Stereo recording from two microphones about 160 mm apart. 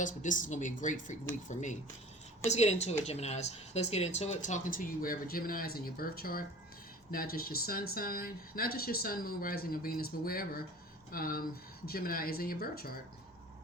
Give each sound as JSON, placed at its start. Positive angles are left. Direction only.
{"t": 0.0, "sound": "speech", "side_deg": 55}